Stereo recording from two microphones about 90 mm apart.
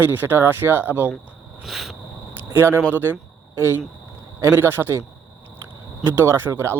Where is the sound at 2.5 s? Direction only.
25° right (ahead or behind).